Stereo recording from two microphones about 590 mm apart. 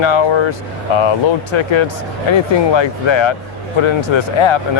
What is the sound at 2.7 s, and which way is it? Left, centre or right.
Speech, left.